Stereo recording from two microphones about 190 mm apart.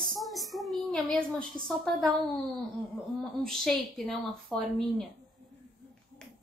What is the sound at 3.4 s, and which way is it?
A woman's voice, centre (ahead or behind).